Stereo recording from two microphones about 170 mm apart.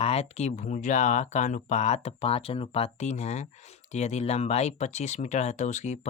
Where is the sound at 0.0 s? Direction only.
40° left (ahead or behind).